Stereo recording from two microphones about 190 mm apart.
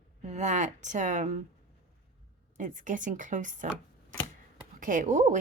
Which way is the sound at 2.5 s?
40° right (ahead or behind).